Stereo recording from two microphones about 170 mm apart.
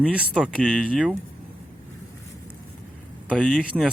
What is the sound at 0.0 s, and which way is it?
Speech, 5° right (ahead or behind).